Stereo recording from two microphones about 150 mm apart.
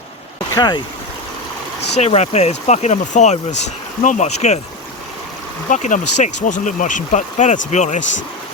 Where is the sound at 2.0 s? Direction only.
45° left (ahead or behind).